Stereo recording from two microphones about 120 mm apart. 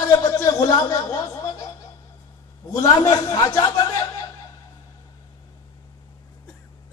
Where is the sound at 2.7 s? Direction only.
30° left (ahead or behind).